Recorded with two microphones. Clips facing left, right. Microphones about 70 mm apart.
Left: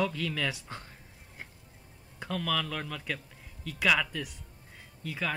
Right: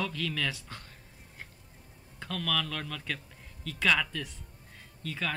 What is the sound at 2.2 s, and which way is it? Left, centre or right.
A man's voice, centre.